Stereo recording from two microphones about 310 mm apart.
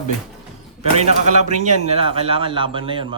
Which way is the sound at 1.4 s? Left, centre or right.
Right.